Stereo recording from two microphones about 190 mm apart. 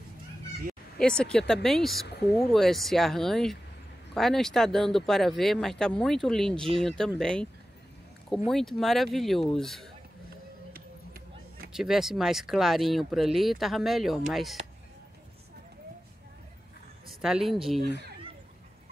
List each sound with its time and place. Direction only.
0.9 s speech: 5° left (ahead or behind)
8.5 s speech: centre (ahead or behind)
10.7 s a sound: 50° right (ahead or behind)
11.7 s speech: centre (ahead or behind)
17.2 s speech: centre (ahead or behind)